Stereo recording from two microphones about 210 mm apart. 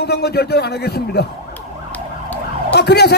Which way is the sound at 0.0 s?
50° left (ahead or behind).